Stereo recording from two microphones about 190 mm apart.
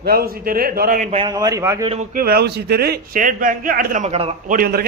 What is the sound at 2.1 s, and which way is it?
A man's voice, 55° right (ahead or behind).